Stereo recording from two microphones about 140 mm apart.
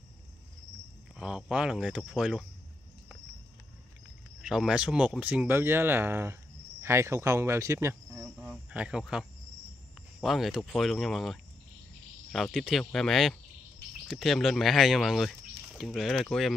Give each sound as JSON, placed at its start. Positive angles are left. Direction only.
{"t": 1.1, "sound": "speech", "side_deg": -5}
{"t": 4.4, "sound": "speech", "side_deg": -5}
{"t": 8.4, "sound": "cricket", "side_deg": -10}
{"t": 10.2, "sound": "speech", "side_deg": 0}